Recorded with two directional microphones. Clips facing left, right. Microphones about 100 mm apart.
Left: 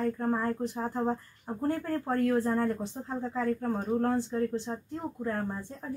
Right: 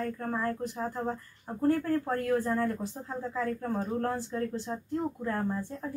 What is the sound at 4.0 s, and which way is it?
Speech, 20° left (ahead or behind).